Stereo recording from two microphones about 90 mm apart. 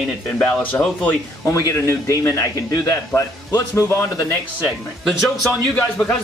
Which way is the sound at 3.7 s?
35° left (ahead or behind).